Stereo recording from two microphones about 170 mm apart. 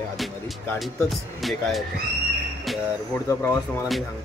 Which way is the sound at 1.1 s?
Centre (ahead or behind).